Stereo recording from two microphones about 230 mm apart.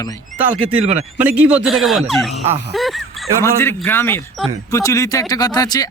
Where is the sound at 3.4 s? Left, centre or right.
Centre.